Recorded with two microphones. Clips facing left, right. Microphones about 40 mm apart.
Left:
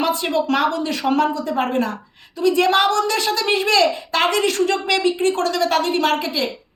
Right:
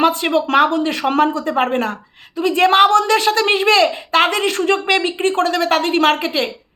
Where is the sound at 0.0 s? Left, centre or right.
Right.